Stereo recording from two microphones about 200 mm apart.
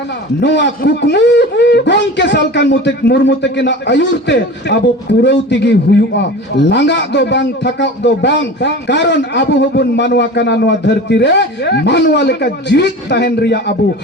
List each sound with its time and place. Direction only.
0.4 s a man's voice: 60° left (ahead or behind)